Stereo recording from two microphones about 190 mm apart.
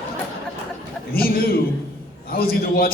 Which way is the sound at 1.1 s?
50° left (ahead or behind).